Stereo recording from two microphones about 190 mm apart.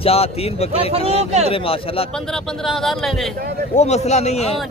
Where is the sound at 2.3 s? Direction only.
Centre (ahead or behind).